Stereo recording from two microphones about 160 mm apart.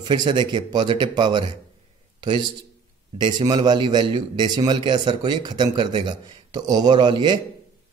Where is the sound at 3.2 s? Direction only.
25° right (ahead or behind).